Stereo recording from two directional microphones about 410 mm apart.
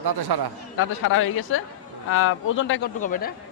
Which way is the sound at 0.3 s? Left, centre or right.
Right.